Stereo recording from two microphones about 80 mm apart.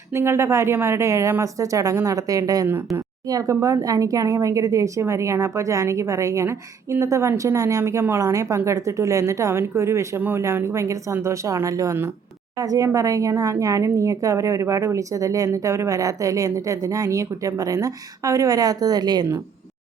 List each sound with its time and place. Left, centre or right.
0.1 s speech: right
2.6 s speech: right
3.2 s speech: right
10.2 s speech: right